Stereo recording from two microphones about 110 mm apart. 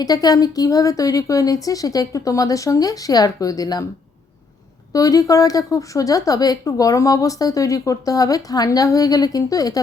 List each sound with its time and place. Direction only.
0.0 s speech: 35° left (ahead or behind)
4.9 s speech: 30° left (ahead or behind)